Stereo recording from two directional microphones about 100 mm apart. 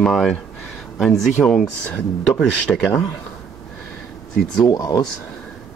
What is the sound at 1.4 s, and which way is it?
Speech, 5° left (ahead or behind).